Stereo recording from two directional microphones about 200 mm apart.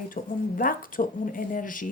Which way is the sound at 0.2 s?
40° left (ahead or behind).